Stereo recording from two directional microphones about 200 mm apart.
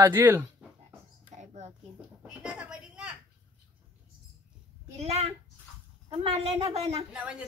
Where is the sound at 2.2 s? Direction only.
5° right (ahead or behind).